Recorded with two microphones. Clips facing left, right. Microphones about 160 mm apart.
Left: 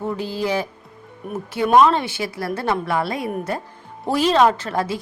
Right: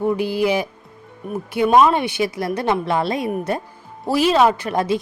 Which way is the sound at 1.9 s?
15° right (ahead or behind).